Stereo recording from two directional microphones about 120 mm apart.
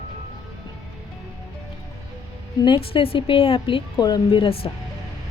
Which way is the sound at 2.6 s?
45° left (ahead or behind).